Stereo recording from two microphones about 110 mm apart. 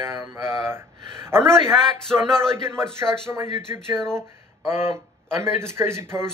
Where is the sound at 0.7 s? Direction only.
20° right (ahead or behind).